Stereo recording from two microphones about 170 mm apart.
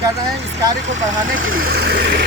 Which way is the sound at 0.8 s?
90° right.